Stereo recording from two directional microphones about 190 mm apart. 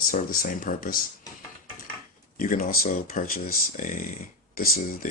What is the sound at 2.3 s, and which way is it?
Speech, 45° left (ahead or behind).